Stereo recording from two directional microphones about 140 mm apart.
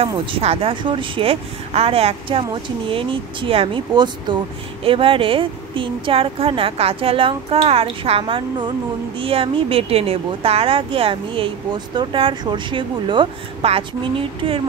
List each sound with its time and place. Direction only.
0.3 s speech: 45° right (ahead or behind)